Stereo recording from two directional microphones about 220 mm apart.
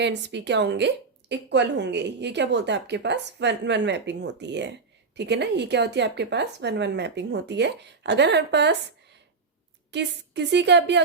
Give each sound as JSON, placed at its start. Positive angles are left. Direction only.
{"t": 0.0, "sound": "a woman's voice", "side_deg": -50}
{"t": 9.9, "sound": "a woman's voice", "side_deg": -50}